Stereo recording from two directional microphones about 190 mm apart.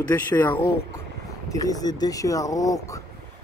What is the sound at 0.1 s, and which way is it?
Speech, 10° left (ahead or behind).